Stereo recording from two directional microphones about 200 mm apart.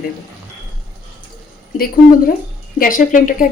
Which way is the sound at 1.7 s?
45° left (ahead or behind).